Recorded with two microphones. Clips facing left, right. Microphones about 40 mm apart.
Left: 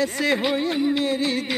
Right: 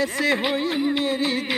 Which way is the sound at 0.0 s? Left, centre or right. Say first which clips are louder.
Even; centre.